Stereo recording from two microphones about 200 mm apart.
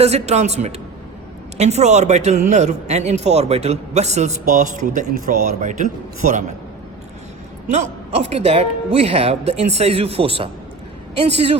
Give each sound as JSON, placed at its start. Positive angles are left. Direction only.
{"t": 0.0, "sound": "a man's voice", "side_deg": -30}
{"t": 7.7, "sound": "a man's voice", "side_deg": -35}